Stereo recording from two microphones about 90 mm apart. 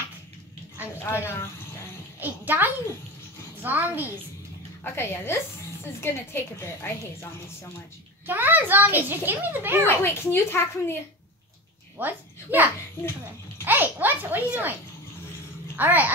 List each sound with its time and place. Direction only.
0.9 s a woman's voice: 30° left (ahead or behind)
2.1 s a child's voice: 20° right (ahead or behind)
4.9 s a woman's voice: 25° left (ahead or behind)
8.3 s a child's voice: 20° right (ahead or behind)
9.8 s a woman's voice: 30° left (ahead or behind)
12.0 s a woman's voice: 20° right (ahead or behind)
13.7 s a child's voice: 20° right (ahead or behind)
15.7 s a child's voice: 20° right (ahead or behind)